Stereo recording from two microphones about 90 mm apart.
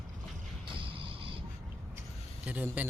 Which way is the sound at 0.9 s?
80° right.